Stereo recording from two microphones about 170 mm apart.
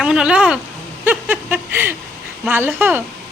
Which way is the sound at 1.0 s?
10° right (ahead or behind).